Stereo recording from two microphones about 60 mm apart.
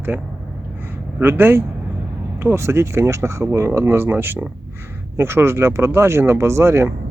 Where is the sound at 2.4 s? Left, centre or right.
Right.